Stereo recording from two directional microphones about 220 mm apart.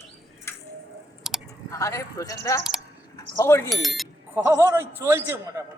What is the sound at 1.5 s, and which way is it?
Speech, 15° left (ahead or behind).